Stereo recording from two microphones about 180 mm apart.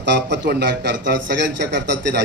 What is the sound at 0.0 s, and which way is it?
A man's voice, 75° right (ahead or behind).